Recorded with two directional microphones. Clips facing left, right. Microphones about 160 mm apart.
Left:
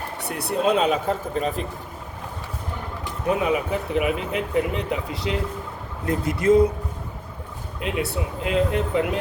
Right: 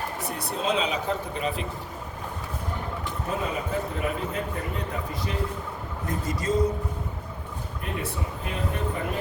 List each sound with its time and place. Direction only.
0.2 s speech: 65° left (ahead or behind); by 1.6 s 40° left (ahead or behind)
3.2 s speech: 70° left (ahead or behind)
6.1 s a sound: 60° left (ahead or behind)
7.8 s speech: 90° left